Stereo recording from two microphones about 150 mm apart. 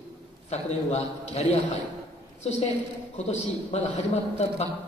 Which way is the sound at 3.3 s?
45° left (ahead or behind).